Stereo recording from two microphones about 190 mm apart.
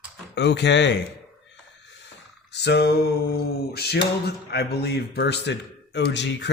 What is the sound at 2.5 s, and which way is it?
A man's voice, 60° left (ahead or behind).